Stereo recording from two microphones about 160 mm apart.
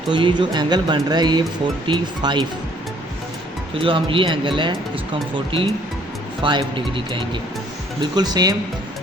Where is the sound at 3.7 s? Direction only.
35° right (ahead or behind).